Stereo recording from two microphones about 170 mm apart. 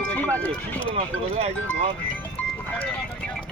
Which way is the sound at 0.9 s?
40° right (ahead or behind).